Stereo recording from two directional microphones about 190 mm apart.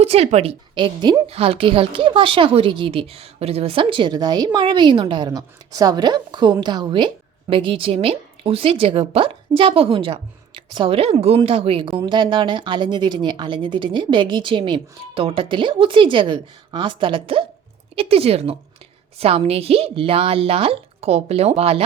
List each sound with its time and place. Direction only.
0.0 s a woman's voice: 35° right (ahead or behind)